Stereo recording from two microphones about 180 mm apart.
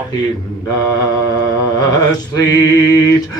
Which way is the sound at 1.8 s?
20° left (ahead or behind).